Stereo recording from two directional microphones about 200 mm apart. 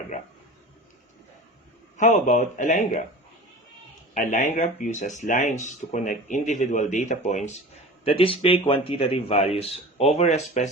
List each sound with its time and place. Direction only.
2.0 s speech: 35° left (ahead or behind)
4.1 s a man's voice: 40° left (ahead or behind)